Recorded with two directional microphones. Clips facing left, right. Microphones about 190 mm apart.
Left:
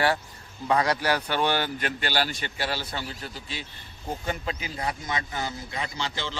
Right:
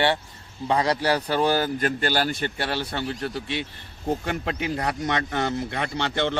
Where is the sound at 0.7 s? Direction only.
30° right (ahead or behind).